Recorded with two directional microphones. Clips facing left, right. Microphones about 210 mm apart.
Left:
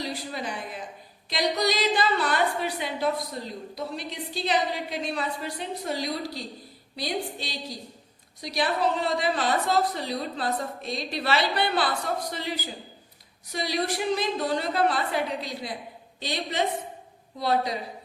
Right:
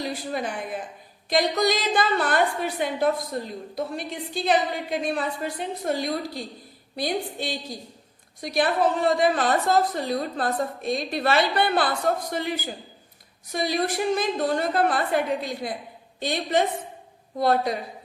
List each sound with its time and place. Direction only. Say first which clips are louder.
0.0 s a woman's voice: right 4 dB; 50° right (ahead or behind)